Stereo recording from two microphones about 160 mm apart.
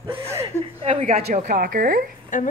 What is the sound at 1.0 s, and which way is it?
Speech, 60° right (ahead or behind).